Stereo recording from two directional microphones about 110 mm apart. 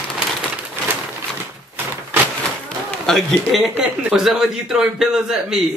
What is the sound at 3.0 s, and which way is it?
Speech, centre (ahead or behind).